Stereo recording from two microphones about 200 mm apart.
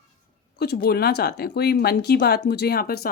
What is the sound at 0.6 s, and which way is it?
A woman's voice, 50° left (ahead or behind).